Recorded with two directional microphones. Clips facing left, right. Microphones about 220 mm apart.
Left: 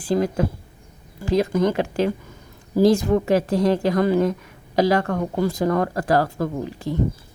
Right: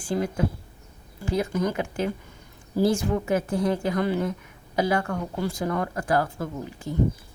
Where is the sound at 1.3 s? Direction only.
90° left.